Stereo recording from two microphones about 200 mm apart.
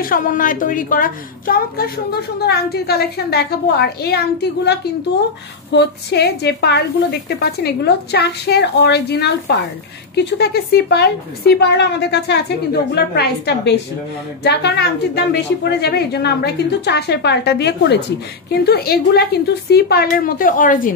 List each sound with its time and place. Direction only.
0.0 s a woman's voice: 45° left (ahead or behind)